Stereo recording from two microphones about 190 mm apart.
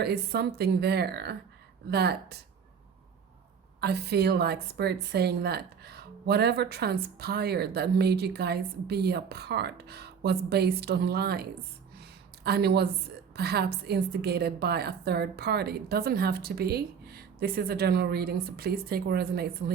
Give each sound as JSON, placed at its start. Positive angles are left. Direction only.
{"t": 0.0, "sound": "a woman's voice", "side_deg": -60}
{"t": 3.8, "sound": "a woman's voice", "side_deg": -60}
{"t": 11.9, "sound": "a sound", "side_deg": -55}
{"t": 13.3, "sound": "a woman's voice", "side_deg": -55}